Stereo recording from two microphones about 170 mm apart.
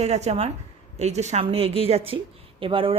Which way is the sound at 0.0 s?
40° right (ahead or behind).